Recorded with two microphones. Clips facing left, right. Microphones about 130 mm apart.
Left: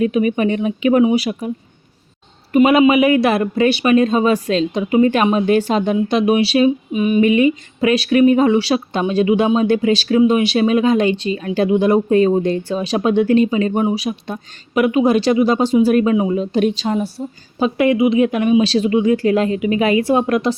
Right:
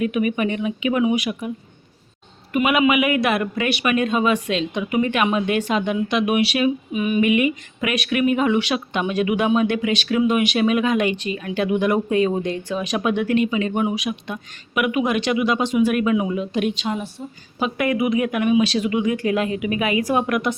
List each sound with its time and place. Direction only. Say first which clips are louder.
0.0 s speech: left 5 dB; 30° left (ahead or behind)